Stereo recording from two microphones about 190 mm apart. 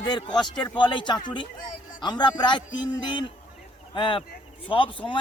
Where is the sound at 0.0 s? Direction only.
25° left (ahead or behind).